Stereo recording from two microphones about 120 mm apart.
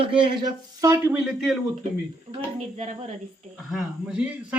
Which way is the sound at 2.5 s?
70° right (ahead or behind).